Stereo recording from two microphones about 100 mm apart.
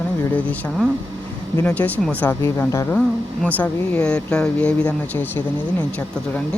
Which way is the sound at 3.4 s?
15° left (ahead or behind).